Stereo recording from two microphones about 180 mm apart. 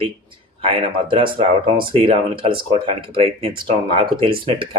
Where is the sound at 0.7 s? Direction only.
30° right (ahead or behind).